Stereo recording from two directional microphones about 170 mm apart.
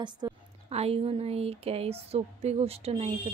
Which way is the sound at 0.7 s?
35° right (ahead or behind).